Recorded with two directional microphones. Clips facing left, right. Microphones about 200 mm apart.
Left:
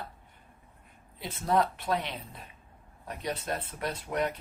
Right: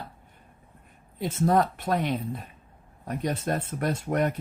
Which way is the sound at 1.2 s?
45° right (ahead or behind).